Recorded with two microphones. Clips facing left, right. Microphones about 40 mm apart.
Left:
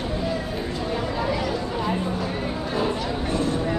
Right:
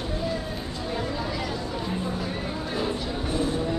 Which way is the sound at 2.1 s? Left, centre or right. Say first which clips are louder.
Left 3 dB; centre.